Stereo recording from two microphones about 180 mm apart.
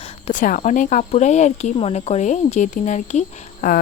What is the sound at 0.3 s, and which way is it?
Speech, 45° left (ahead or behind).